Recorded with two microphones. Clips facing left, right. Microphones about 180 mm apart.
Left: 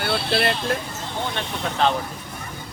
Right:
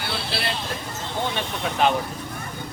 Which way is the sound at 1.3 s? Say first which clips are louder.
Even; 10° right (ahead or behind).